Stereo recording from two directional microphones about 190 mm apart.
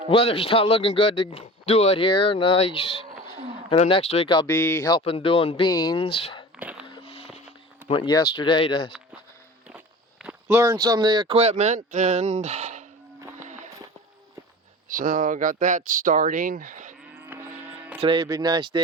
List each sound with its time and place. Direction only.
0.1 s speech: 30° left (ahead or behind)
4.5 s speech: 10° left (ahead or behind); by 6.4 s 30° left (ahead or behind)
6.6 s a sound: 5° right (ahead or behind)
6.8 s a sound: 25° left (ahead or behind)
7.9 s speech: 25° left (ahead or behind)
10.2 s speech: 15° right (ahead or behind); by 12.8 s 35° right (ahead or behind)
14.9 s speech: 45° right (ahead or behind)
17.2 s vehicle: 10° right (ahead or behind)
17.5 s music: 40° right (ahead or behind)
18.0 s speech: 25° right (ahead or behind)